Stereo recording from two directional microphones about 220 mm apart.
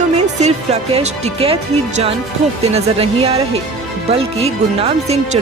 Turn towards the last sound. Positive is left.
turn(degrees=-30)  # may be behind; listen again after turning